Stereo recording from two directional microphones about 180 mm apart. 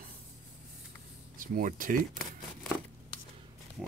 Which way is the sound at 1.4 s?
50° right (ahead or behind).